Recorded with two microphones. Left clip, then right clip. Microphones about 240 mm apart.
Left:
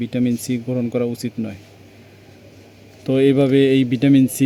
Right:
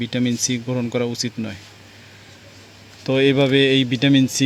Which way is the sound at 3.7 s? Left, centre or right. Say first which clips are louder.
Left 1 dB; right.